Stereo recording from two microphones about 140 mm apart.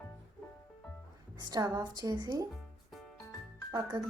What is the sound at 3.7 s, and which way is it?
Speech, 25° right (ahead or behind).